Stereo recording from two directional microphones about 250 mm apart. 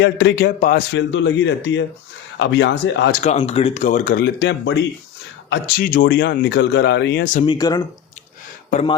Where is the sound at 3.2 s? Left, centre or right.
Left.